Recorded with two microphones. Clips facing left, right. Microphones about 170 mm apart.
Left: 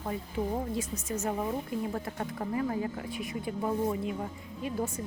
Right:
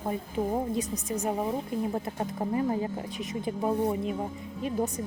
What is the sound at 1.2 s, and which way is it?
Speech, 20° right (ahead or behind).